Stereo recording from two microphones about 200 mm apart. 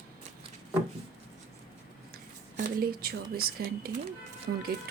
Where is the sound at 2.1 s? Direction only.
50° right (ahead or behind).